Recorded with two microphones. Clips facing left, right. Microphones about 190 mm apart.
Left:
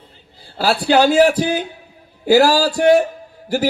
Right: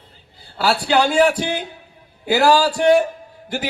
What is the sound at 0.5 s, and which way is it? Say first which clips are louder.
Speech: left 3 dB; 30° left (ahead or behind).